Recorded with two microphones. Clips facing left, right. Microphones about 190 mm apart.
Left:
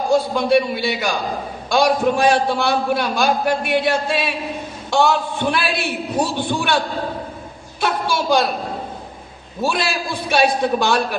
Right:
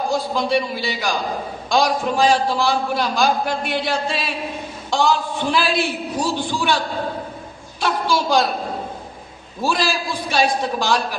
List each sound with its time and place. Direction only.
0.3 s a man's voice: 60° left (ahead or behind)
9.6 s a man's voice: 60° left (ahead or behind)